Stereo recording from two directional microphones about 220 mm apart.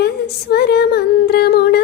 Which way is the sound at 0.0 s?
45° left (ahead or behind).